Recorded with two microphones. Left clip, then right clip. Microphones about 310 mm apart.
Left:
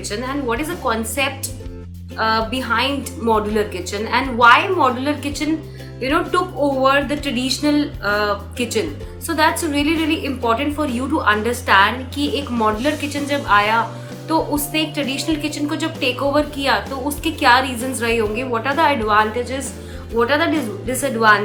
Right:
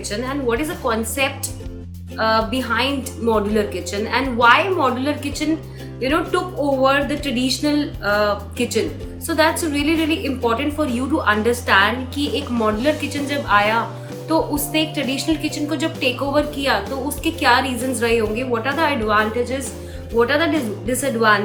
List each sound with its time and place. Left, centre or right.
0.1 s a woman's voice: centre